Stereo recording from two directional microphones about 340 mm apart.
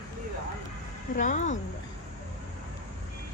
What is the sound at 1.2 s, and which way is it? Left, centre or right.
Speech, left.